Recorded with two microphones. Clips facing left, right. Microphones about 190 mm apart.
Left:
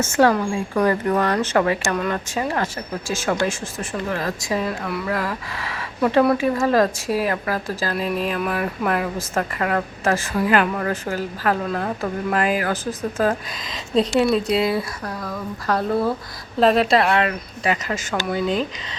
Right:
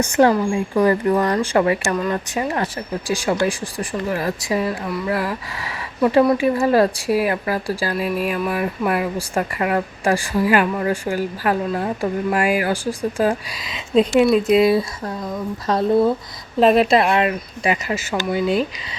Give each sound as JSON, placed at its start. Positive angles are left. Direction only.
{"t": 0.0, "sound": "a woman's voice", "side_deg": -15}
{"t": 14.6, "sound": "a woman's voice", "side_deg": -20}